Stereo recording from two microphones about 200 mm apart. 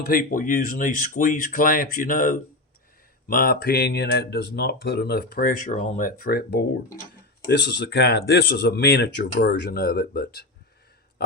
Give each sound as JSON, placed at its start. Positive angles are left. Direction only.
{"t": 0.0, "sound": "speech", "side_deg": 45}